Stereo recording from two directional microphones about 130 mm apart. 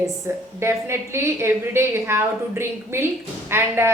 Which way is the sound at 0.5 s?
20° right (ahead or behind).